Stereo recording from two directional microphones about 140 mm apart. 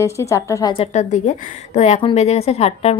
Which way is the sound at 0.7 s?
55° left (ahead or behind).